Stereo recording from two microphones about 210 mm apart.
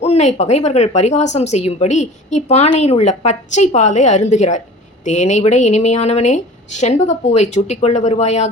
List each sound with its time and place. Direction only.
0.0 s speech: 30° left (ahead or behind)